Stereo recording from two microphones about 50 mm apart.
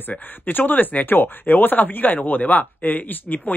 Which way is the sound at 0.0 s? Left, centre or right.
Left.